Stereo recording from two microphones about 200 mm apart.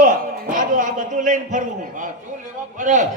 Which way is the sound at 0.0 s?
40° right (ahead or behind).